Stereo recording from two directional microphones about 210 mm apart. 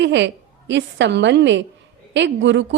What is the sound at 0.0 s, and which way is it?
A woman's voice, 55° right (ahead or behind).